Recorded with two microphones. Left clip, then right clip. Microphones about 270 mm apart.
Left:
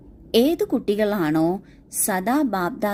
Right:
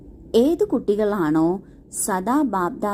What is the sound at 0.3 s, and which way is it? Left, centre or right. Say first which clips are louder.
A woman's voice: right 1 dB; left.